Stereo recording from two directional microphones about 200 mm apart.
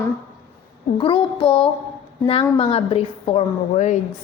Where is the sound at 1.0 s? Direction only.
25° left (ahead or behind).